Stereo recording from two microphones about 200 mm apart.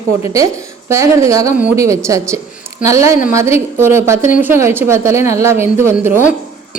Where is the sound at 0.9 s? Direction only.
15° right (ahead or behind).